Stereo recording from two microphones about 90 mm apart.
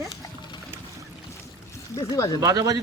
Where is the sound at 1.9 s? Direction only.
35° left (ahead or behind).